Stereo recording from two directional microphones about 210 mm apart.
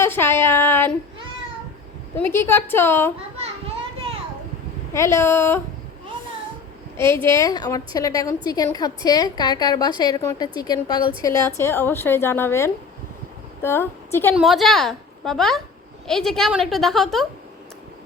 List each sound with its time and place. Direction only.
0.0 s a woman's voice: 10° left (ahead or behind)
2.1 s a woman's voice: 10° left (ahead or behind)
4.9 s a woman's voice: 15° left (ahead or behind)
6.9 s a woman's voice: 10° left (ahead or behind)
14.3 s a woman's voice: centre (ahead or behind)